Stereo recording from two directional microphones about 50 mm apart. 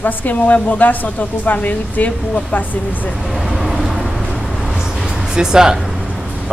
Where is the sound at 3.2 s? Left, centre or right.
Centre.